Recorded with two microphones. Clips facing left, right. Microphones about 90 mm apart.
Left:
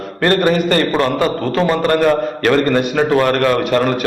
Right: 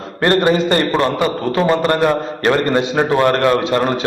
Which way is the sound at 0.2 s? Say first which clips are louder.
Even; 25° right (ahead or behind).